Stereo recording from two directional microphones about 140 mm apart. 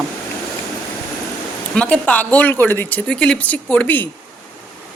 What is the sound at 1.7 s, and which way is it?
Speech, 10° left (ahead or behind).